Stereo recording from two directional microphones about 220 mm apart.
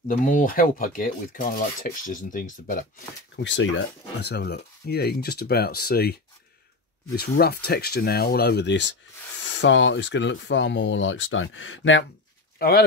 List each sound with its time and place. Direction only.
0.2 s speech: 35° left (ahead or behind)
3.4 s speech: 55° left (ahead or behind)
7.2 s speech: 45° left (ahead or behind); by 12.0 s 60° left (ahead or behind)
12.5 s speech: 45° left (ahead or behind)